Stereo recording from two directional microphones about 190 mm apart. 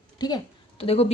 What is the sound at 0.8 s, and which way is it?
Speech, 30° left (ahead or behind).